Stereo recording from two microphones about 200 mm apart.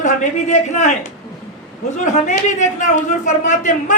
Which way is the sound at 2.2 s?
40° left (ahead or behind).